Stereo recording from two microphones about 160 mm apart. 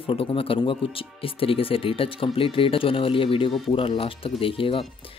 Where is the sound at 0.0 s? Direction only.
35° left (ahead or behind).